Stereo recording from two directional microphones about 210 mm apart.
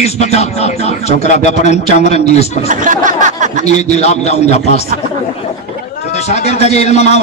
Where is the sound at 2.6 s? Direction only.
40° right (ahead or behind).